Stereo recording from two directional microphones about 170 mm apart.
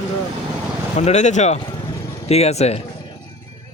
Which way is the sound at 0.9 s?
40° left (ahead or behind).